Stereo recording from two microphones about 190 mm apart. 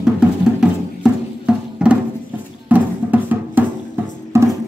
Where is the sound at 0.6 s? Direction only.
5° right (ahead or behind).